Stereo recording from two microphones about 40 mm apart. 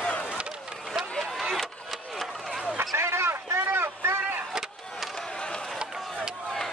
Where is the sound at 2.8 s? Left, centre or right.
Right.